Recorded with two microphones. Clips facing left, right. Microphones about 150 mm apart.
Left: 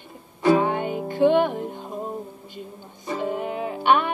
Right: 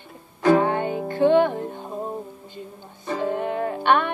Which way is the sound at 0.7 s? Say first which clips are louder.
Right 1 dB; 15° left (ahead or behind).